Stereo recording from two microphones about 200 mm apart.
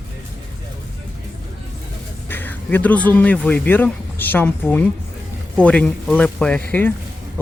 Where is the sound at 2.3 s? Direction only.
10° left (ahead or behind).